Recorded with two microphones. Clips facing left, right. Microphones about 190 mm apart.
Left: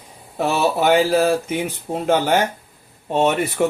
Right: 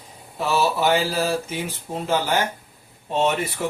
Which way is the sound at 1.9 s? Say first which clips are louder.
Left 5 dB; 45° left (ahead or behind).